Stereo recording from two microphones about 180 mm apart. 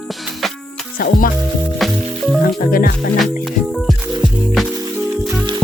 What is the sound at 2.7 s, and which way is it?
Speech, 55° left (ahead or behind).